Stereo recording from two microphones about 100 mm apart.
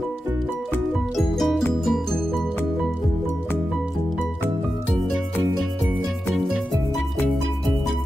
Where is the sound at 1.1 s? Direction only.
Centre (ahead or behind).